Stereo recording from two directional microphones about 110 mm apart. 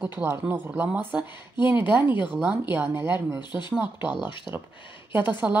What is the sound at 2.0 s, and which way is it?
Speech, 45° left (ahead or behind).